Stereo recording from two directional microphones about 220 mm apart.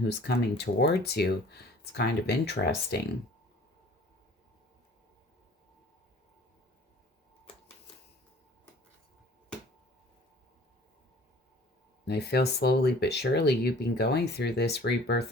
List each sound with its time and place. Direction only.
0.2 s speech: 50° left (ahead or behind)
12.0 s speech: 50° left (ahead or behind)